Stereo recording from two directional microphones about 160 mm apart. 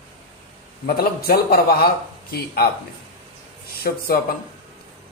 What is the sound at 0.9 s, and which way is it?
Speech, 75° left (ahead or behind).